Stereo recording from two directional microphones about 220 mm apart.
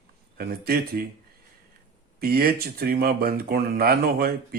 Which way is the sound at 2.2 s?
45° right (ahead or behind).